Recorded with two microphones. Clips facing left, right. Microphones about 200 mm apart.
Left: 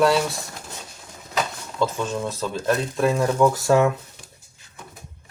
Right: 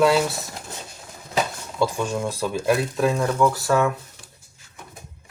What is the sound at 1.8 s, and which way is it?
Speech, 10° right (ahead or behind).